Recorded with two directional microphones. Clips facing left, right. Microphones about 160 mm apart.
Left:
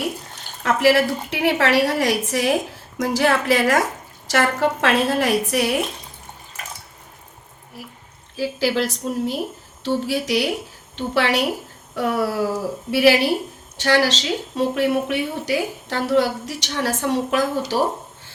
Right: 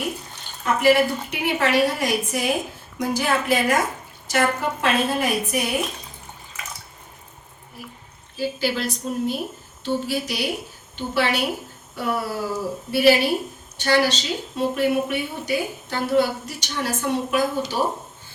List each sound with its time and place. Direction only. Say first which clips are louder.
0.6 s a woman's voice: left 1 dB; 85° left
8.4 s a woman's voice: left 3 dB; 90° left